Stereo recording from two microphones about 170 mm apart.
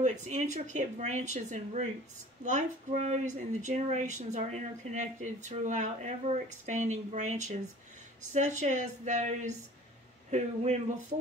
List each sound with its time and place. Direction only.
0.0 s a man's voice: 45° right (ahead or behind)